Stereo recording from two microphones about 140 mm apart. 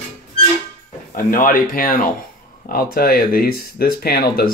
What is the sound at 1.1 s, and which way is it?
Speech, 85° left.